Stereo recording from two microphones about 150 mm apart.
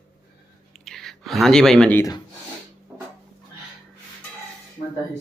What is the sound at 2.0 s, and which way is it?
Speech, 25° left (ahead or behind).